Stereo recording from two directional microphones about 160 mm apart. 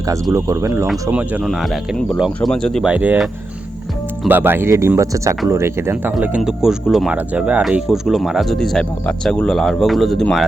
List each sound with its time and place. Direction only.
0.1 s speech: 20° right (ahead or behind)
4.3 s speech: 10° right (ahead or behind)